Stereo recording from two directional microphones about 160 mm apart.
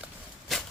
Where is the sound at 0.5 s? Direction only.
Centre (ahead or behind).